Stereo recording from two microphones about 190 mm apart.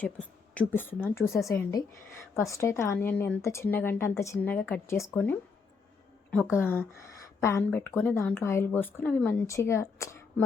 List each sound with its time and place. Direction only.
0.0 s a woman's voice: 10° left (ahead or behind)